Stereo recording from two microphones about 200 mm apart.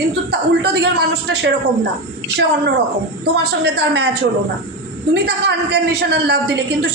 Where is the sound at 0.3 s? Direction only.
55° right (ahead or behind).